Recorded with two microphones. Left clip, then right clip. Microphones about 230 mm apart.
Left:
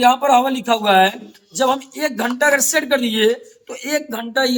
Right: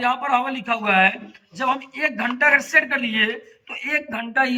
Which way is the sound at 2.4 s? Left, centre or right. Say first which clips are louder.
Even; left.